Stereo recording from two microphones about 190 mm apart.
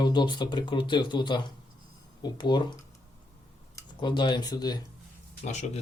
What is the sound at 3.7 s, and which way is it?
Speech, 25° left (ahead or behind).